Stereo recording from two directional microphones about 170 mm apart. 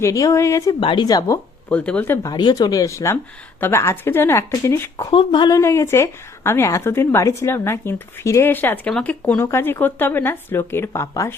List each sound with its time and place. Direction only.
0.0 s speech: 20° left (ahead or behind)
1.7 s a woman's voice: 10° left (ahead or behind)
2.3 s a woman's voice: 25° left (ahead or behind)